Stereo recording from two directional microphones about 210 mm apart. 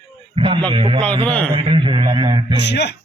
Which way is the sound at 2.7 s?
55° left (ahead or behind).